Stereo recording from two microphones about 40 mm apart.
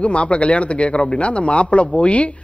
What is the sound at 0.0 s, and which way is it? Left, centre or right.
A man's voice, left.